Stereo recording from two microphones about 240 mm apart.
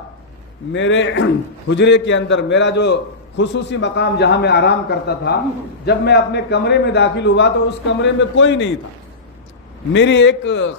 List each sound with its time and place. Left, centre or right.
0.7 s a man's voice: left
9.9 s a man's voice: left